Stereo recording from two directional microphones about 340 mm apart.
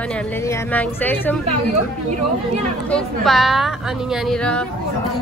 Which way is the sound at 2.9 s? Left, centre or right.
Centre.